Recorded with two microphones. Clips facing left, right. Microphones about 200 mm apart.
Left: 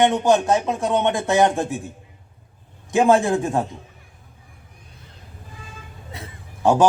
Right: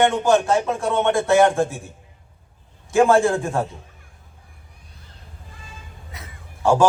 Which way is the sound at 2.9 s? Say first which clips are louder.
Right 1 dB; 20° left (ahead or behind).